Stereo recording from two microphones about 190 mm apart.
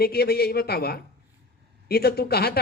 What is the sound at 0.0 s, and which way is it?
Speech, 55° left (ahead or behind).